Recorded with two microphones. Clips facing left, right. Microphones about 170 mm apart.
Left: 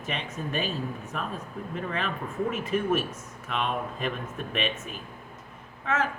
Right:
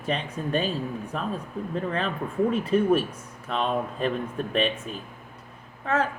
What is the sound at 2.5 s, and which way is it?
Speech, 30° right (ahead or behind).